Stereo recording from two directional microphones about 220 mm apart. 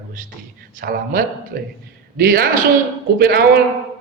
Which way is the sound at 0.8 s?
40° right (ahead or behind).